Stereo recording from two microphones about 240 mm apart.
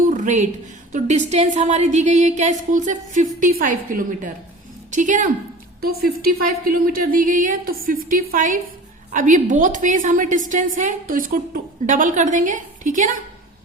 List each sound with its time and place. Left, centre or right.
0.1 s a sound: right
0.9 s a woman's voice: right
6.7 s a woman's voice: right